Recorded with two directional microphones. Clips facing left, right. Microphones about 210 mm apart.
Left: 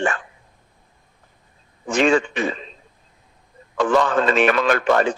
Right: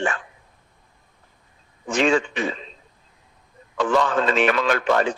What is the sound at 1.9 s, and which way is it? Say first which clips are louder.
Speech: left 2 dB; 50° left (ahead or behind).